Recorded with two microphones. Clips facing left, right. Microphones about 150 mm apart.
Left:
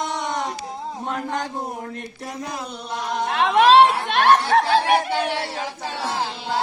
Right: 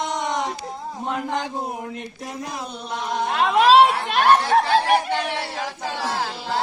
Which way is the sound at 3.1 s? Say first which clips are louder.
Left 1 dB; centre (ahead or behind).